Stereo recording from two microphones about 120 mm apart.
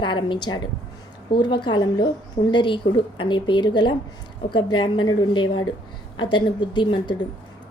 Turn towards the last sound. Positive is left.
turn(degrees=40)  # may be behind; listen again after turning